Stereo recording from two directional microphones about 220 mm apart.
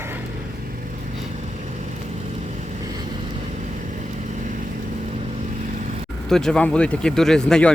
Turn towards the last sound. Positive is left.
turn(degrees=5)  # may be behind; listen again after turning